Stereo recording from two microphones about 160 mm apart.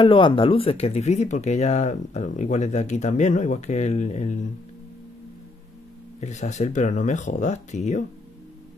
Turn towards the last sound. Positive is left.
turn(degrees=45)  # may be behind; listen again after turning